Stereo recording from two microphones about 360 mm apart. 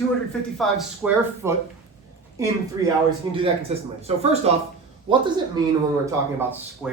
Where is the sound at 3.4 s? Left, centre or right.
Centre.